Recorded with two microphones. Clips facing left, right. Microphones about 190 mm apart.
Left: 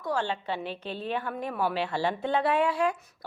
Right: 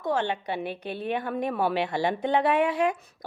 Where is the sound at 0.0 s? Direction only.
20° right (ahead or behind).